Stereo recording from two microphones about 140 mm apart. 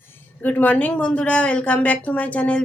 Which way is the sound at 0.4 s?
10° left (ahead or behind).